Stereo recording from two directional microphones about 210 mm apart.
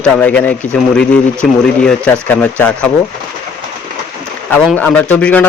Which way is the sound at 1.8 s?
10° left (ahead or behind).